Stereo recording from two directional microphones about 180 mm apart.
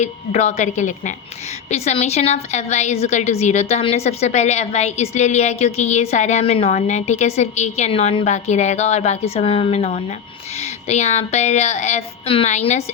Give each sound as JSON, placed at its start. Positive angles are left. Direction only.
{"t": 0.0, "sound": "a woman's voice", "side_deg": 40}